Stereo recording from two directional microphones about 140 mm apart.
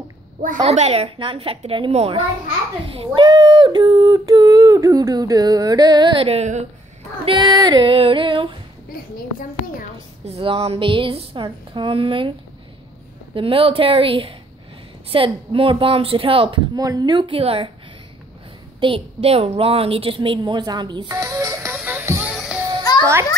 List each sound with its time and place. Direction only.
0.7 s a woman's voice: 50° right (ahead or behind)
3.0 s a sound: 35° right (ahead or behind); by 6.6 s 50° right (ahead or behind)
7.2 s a woman's voice: 35° right (ahead or behind)
9.1 s a child's voice: 80° left
10.2 s a woman's voice: 45° right (ahead or behind)
18.8 s a woman's voice: 40° right (ahead or behind)
21.2 s music: 20° right (ahead or behind)
22.3 s children playing: centre (ahead or behind)
22.9 s children playing: 25° left (ahead or behind)